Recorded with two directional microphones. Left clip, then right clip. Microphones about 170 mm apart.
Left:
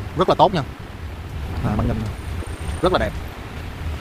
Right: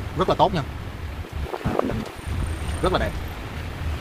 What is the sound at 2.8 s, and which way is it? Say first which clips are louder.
Speech: left 4 dB; 55° left (ahead or behind).